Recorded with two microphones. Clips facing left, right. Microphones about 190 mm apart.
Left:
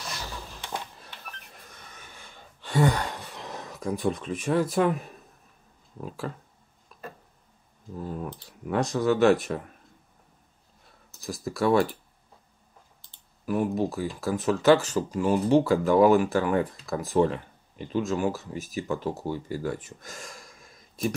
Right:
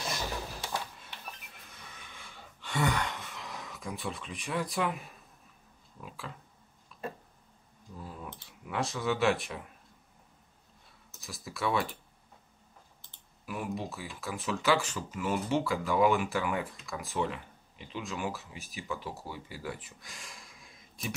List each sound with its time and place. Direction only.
0.2 s a sound: 15° right (ahead or behind)
1.5 s sigh: 40° left (ahead or behind)
4.7 s speech: 40° left (ahead or behind)
8.0 s speech: 50° left (ahead or behind)
8.3 s speech: 35° left (ahead or behind)
11.1 s a sound: 35° left (ahead or behind)
11.4 s speech: 45° left (ahead or behind)
13.1 s speech: 40° left (ahead or behind)